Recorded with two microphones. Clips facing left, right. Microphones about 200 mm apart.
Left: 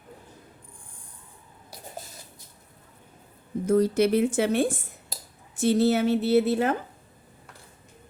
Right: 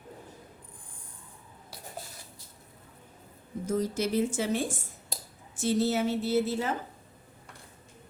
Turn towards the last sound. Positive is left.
turn(degrees=60)  # may be behind; listen again after turning